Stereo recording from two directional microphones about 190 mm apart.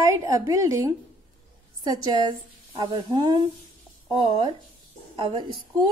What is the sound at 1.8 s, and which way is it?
A woman's voice, 20° right (ahead or behind).